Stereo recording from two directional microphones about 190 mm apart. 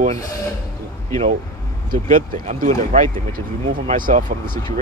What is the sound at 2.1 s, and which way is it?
Speech, 45° right (ahead or behind).